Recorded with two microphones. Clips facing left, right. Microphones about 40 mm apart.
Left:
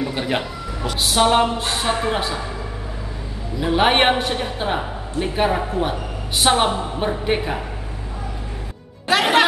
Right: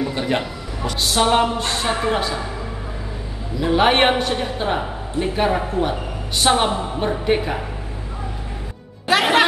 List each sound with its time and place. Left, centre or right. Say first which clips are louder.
0.0 s speech: right 1 dB; centre
3.5 s speech: right 1 dB; centre
9.0 s music: even; centre